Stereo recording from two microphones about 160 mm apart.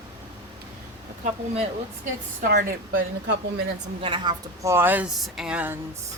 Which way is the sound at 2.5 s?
70° right (ahead or behind).